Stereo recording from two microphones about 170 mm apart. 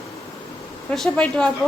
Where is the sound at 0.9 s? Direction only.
5° left (ahead or behind).